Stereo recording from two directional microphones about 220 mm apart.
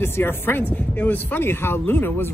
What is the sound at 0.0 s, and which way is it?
Speech, 10° left (ahead or behind).